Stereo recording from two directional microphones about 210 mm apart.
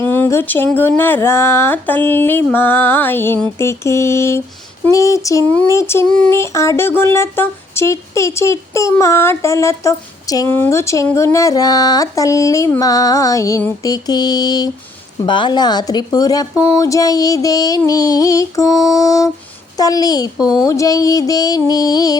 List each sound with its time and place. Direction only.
0.0 s child singing: 10° left (ahead or behind)